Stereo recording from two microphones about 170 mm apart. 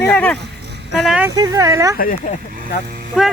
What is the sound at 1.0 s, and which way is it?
Speech, 5° right (ahead or behind).